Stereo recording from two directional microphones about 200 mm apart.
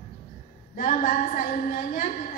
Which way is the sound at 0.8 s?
40° left (ahead or behind).